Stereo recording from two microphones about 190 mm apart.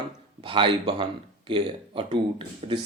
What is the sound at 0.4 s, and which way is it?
Speech, 25° right (ahead or behind).